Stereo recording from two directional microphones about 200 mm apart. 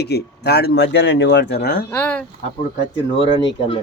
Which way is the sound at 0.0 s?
55° left (ahead or behind).